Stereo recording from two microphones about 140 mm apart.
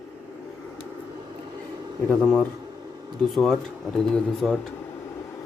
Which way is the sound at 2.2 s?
10° left (ahead or behind).